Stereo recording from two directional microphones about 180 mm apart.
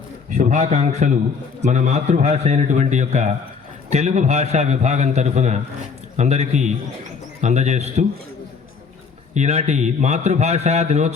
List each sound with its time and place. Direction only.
0.3 s a man's voice: 40° right (ahead or behind)
9.3 s a man's voice: 40° right (ahead or behind)